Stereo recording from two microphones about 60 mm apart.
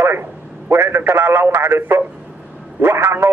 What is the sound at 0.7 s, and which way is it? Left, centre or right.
Speech, right.